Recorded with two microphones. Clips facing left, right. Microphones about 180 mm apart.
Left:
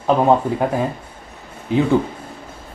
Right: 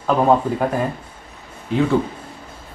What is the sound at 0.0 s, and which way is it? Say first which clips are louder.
Speech: left 1 dB; 10° left (ahead or behind).